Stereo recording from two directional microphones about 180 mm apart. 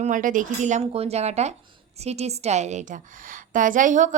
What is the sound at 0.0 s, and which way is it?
Speech, 45° right (ahead or behind).